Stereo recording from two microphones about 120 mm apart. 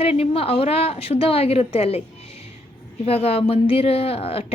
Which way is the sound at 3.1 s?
55° left (ahead or behind).